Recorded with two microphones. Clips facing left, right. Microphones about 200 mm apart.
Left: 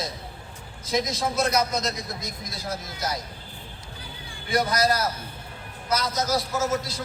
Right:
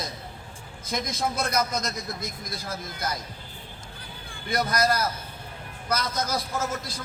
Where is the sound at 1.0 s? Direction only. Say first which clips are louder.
Left 3 dB; 50° right (ahead or behind).